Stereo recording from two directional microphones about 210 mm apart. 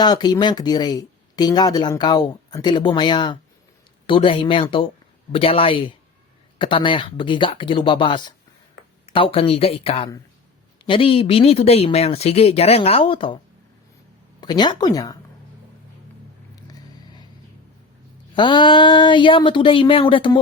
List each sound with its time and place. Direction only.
0.0 s speech: 20° left (ahead or behind)
14.4 s speech: 20° left (ahead or behind)
16.7 s vehicle: 20° left (ahead or behind)
18.3 s speech: 20° left (ahead or behind)